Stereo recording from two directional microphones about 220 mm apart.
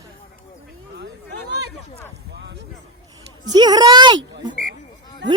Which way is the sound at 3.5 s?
20° right (ahead or behind).